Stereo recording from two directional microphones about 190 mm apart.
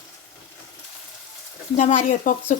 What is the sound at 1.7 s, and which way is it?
Speech, 40° left (ahead or behind).